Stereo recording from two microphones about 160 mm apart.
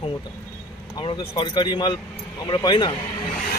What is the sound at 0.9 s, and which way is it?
Speech, 25° left (ahead or behind).